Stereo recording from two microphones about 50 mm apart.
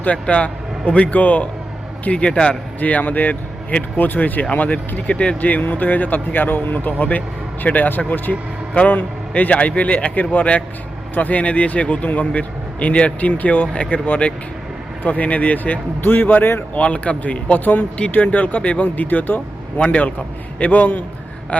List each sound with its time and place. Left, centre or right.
0.0 s a man's voice: left
2.0 s a man's voice: left
2.8 s speech: left
5.0 s a man's voice: left
5.4 s a man's voice: left
16.7 s a man's voice: left
21.5 s a sound: left